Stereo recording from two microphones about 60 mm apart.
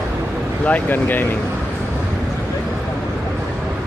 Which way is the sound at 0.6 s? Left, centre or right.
Left.